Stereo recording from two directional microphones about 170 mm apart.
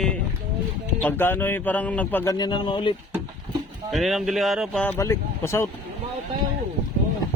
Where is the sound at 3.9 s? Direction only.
Centre (ahead or behind).